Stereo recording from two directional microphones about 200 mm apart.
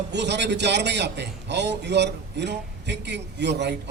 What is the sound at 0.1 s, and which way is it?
A man's voice, 60° right (ahead or behind).